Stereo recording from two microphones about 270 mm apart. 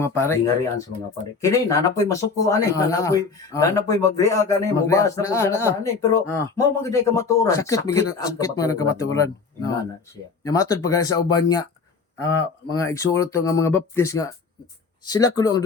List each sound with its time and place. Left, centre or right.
0.0 s speech: centre